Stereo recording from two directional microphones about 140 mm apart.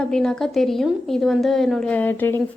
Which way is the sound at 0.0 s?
5° left (ahead or behind).